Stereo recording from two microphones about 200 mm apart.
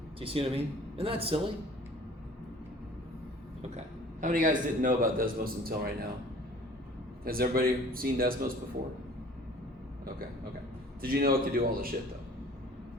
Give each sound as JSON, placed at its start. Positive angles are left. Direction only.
{"t": 0.2, "sound": "a man's voice", "side_deg": -30}
{"t": 3.6, "sound": "a man's voice", "side_deg": -35}
{"t": 7.3, "sound": "a man's voice", "side_deg": -45}
{"t": 11.0, "sound": "a man's voice", "side_deg": -50}